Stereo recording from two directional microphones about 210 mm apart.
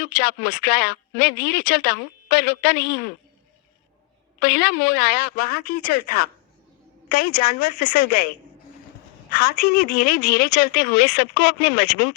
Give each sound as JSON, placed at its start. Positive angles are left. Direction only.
{"t": 0.2, "sound": "speech", "side_deg": 50}
{"t": 4.4, "sound": "speech", "side_deg": 50}
{"t": 9.3, "sound": "speech", "side_deg": 45}